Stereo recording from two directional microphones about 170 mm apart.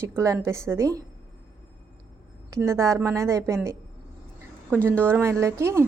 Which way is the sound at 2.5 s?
15° right (ahead or behind).